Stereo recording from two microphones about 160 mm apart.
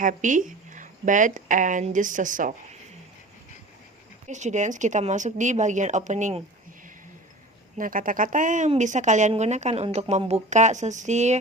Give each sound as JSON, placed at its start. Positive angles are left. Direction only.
{"t": 0.0, "sound": "speech", "side_deg": -55}
{"t": 4.3, "sound": "speech", "side_deg": -50}
{"t": 7.8, "sound": "speech", "side_deg": -60}